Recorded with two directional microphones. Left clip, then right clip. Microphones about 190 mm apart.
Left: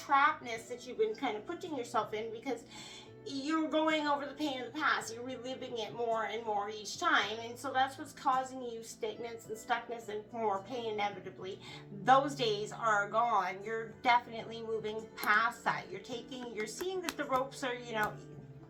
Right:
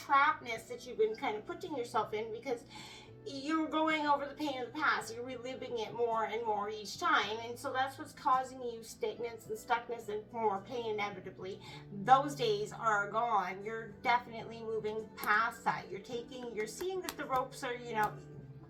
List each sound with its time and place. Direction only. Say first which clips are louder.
0.1 s a woman's voice: even; 10° left (ahead or behind)